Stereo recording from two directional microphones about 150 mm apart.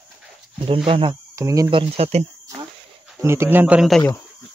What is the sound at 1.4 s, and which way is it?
Speech, 25° right (ahead or behind).